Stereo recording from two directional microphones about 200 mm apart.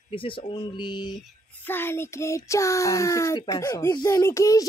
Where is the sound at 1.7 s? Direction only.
10° left (ahead or behind).